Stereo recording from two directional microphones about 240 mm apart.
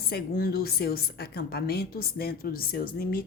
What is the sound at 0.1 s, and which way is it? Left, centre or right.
A woman's voice, left.